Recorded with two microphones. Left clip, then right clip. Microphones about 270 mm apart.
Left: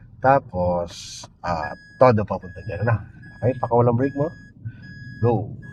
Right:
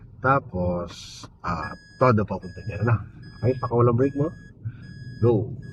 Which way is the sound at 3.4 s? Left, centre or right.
Left.